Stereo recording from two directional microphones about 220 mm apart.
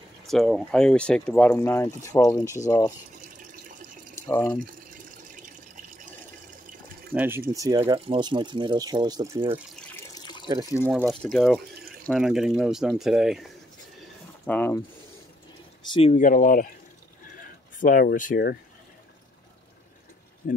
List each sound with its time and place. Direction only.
0.3 s speech: centre (ahead or behind)
4.3 s speech: 10° left (ahead or behind)
5.3 s water: 35° right (ahead or behind)
7.2 s speech: 10° right (ahead or behind)
9.9 s water: 20° left (ahead or behind)
10.4 s speech: 20° right (ahead or behind)
10.9 s speech: centre (ahead or behind)
14.4 s mechanisms: 5° left (ahead or behind)
15.9 s speech: 25° left (ahead or behind)
17.7 s speech: 40° left (ahead or behind)
20.4 s speech: 40° left (ahead or behind)